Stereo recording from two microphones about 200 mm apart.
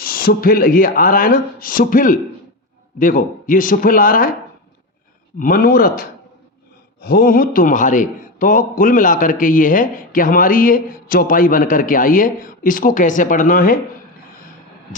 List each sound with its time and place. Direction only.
0.0 s a man's voice: 50° left (ahead or behind)
5.4 s a man's voice: 45° left (ahead or behind)